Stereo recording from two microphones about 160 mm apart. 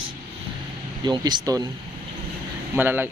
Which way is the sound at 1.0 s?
25° right (ahead or behind).